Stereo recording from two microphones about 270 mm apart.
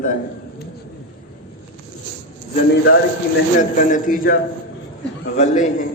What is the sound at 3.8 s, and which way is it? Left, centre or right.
A man's voice, left.